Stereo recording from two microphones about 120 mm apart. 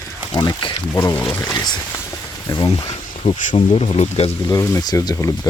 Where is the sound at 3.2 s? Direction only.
50° left (ahead or behind).